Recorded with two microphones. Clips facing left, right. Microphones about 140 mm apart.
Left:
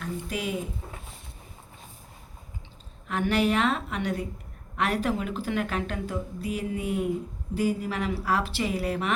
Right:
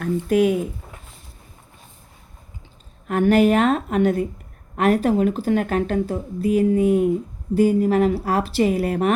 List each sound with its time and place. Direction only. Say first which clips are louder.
0.0 s speech: right 14 dB; 55° right (ahead or behind)
3.1 s speech: right 9 dB; 50° right (ahead or behind)